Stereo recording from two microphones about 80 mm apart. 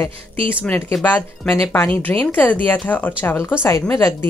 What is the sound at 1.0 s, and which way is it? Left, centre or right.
Speech, left.